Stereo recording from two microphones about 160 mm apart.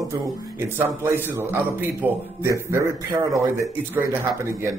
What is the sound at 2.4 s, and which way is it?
Speech, 15° right (ahead or behind).